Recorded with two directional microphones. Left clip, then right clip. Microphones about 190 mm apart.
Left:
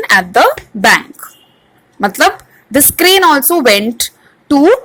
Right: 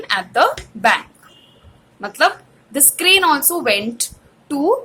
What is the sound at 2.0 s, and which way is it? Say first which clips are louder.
A woman's voice: left 6 dB; 35° left (ahead or behind).